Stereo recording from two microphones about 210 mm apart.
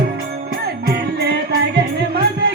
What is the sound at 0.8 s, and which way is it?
Music, 50° right (ahead or behind).